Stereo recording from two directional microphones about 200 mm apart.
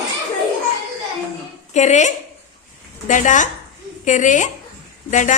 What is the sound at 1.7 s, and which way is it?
Speech, 35° left (ahead or behind).